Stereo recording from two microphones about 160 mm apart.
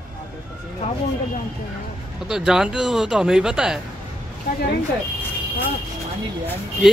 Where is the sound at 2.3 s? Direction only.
5° right (ahead or behind).